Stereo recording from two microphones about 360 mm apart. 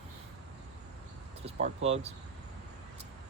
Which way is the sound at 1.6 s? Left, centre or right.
Centre.